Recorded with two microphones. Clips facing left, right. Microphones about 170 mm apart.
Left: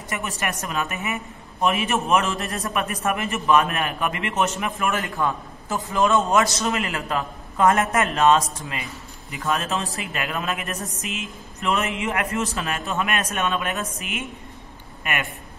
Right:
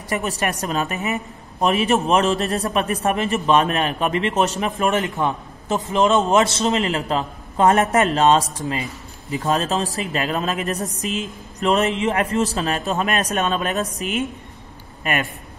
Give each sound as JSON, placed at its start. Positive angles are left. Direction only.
{"t": 0.1, "sound": "a woman's voice", "side_deg": -35}